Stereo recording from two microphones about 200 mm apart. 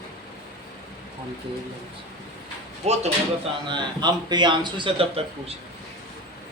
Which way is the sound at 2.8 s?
35° right (ahead or behind).